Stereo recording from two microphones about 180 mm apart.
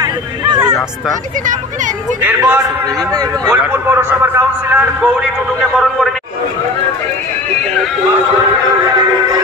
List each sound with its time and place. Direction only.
2.2 s a man's voice: 10° right (ahead or behind)